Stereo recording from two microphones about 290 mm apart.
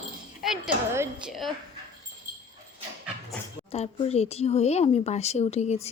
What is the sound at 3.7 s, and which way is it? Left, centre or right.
Speech, left.